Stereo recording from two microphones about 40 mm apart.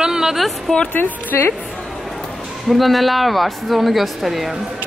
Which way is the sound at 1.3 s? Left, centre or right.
Left.